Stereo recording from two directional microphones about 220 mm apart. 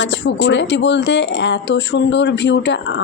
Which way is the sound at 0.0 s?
55° left (ahead or behind).